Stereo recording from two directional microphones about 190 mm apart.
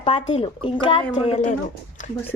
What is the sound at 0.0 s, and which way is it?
Speech, 25° left (ahead or behind).